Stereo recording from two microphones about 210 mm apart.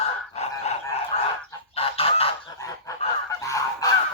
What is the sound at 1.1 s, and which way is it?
Chicken, 30° left (ahead or behind).